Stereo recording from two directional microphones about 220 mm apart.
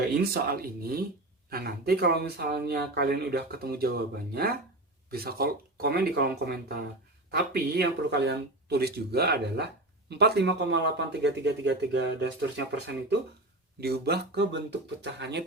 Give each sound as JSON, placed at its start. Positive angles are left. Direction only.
{"t": 0.2, "sound": "speech", "side_deg": -45}